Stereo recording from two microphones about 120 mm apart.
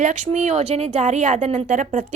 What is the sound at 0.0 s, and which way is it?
Speech, 85° right.